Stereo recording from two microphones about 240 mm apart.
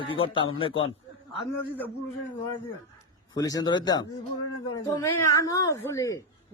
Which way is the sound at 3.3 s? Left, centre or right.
Centre.